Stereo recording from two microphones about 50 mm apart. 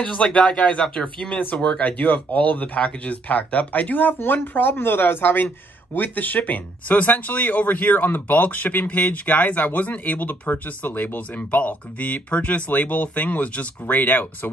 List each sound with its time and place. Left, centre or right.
0.0 s speech: left
1.8 s speech: left